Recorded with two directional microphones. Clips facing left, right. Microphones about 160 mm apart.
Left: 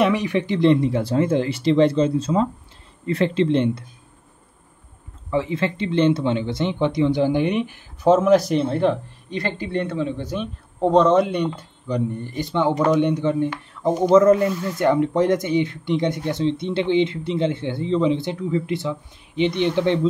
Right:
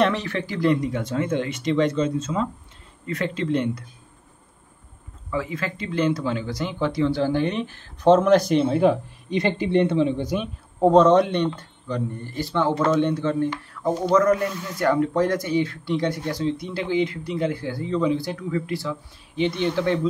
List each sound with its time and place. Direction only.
0.0 s speech: 15° left (ahead or behind)
5.3 s speech: 25° left (ahead or behind); by 8.9 s 5° right (ahead or behind)
9.3 s speech: 20° right (ahead or behind); by 20.1 s 20° left (ahead or behind)